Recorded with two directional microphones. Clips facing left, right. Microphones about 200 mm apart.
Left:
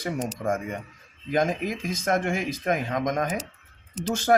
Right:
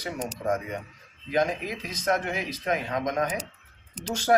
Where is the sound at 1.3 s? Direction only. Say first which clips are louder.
Left 2 dB; 45° left (ahead or behind).